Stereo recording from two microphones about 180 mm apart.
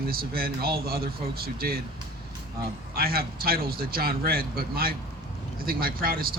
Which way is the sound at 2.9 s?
55° right (ahead or behind).